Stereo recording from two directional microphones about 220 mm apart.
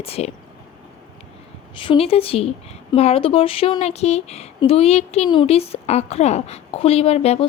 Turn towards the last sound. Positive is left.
turn(degrees=25)  # may be behind; listen again after turning